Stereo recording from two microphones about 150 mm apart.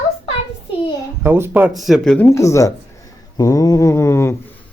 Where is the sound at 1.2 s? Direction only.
15° right (ahead or behind); by 2.2 s 5° left (ahead or behind).